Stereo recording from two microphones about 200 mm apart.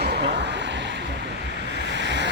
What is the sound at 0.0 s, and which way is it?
Vehicle, 55° right (ahead or behind).